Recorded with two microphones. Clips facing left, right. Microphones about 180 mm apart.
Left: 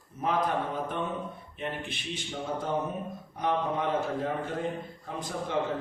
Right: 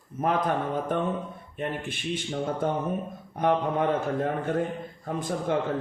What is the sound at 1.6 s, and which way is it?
A man's voice, 50° right (ahead or behind).